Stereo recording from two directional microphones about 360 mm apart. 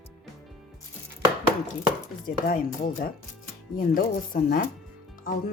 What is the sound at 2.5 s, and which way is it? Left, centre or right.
Speech, left.